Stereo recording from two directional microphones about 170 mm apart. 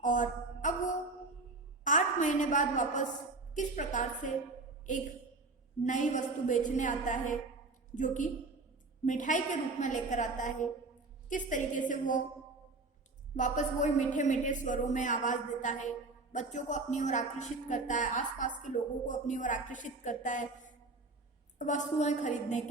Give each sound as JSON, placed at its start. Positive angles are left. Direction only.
{"t": 0.0, "sound": "a sound", "side_deg": 50}
{"t": 3.5, "sound": "a man's voice", "side_deg": 45}
{"t": 5.8, "sound": "a man's voice", "side_deg": 50}
{"t": 13.3, "sound": "a man's voice", "side_deg": 45}